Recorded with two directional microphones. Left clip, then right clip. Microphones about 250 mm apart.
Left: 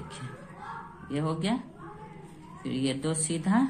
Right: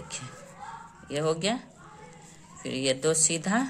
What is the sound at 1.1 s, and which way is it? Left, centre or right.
Speech, right.